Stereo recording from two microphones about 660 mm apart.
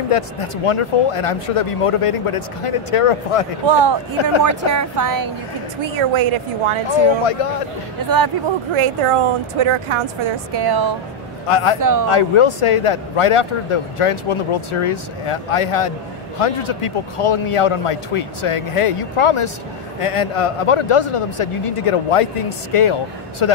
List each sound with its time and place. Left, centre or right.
0.1 s a man's voice: left
3.6 s speech: right
4.4 s a woman's voice: right
5.9 s a woman's voice: right
8.7 s a woman's voice: right
11.4 s a man's voice: left
11.8 s a woman's voice: right
12.1 s a man's voice: left